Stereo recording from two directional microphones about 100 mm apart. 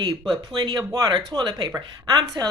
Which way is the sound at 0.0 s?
40° right (ahead or behind).